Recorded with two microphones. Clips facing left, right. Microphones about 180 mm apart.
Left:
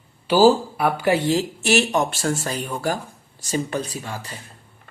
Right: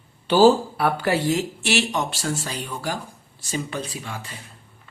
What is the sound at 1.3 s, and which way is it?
Speech, 40° left (ahead or behind).